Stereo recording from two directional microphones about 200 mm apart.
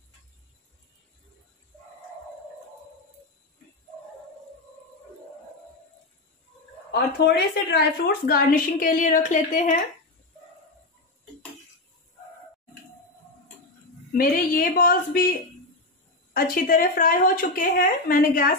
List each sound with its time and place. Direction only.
6.9 s a woman's voice: 55° left (ahead or behind); by 9.8 s 40° left (ahead or behind)
14.1 s a woman's voice: 45° left (ahead or behind)
16.3 s a woman's voice: 45° left (ahead or behind)